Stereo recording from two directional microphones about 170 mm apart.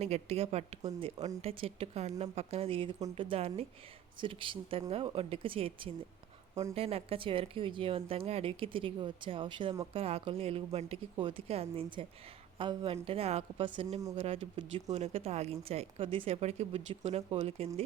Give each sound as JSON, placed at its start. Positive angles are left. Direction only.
{"t": 0.0, "sound": "speech", "side_deg": -35}
{"t": 6.5, "sound": "speech", "side_deg": -20}
{"t": 6.7, "sound": "speech", "side_deg": -35}